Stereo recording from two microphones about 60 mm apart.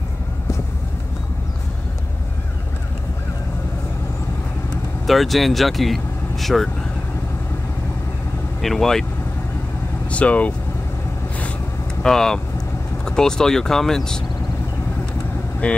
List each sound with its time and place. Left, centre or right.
5.0 s speech: centre
8.5 s speech: centre
10.1 s speech: left
12.0 s speech: centre
15.6 s speech: centre